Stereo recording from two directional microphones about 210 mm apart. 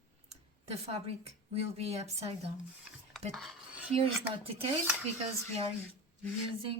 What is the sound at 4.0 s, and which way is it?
Speech, 25° right (ahead or behind).